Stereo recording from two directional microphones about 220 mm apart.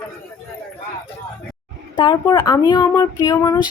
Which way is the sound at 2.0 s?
20° left (ahead or behind).